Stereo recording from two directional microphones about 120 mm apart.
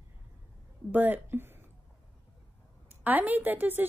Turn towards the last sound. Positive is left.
turn(degrees=-15)  # may be behind; listen again after turning